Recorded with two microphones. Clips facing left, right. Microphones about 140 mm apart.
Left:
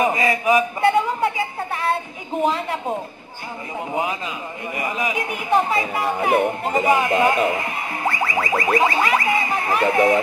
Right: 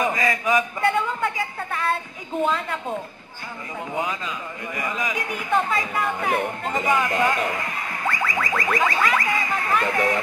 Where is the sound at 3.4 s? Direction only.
20° left (ahead or behind).